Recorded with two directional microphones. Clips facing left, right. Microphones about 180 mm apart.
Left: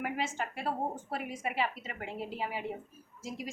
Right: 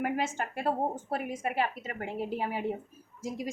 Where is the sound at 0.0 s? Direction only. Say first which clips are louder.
Right 4 dB; 50° right (ahead or behind).